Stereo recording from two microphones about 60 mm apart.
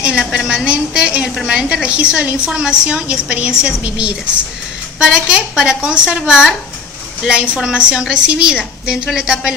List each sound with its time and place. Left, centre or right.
0.0 s a woman's voice: centre